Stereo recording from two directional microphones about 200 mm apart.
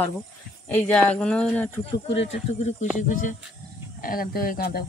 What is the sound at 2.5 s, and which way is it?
Speech, 35° left (ahead or behind).